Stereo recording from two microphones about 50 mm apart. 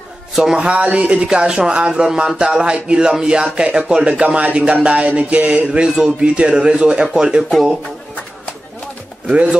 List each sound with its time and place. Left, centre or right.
0.4 s speech: centre
5.7 s speech: centre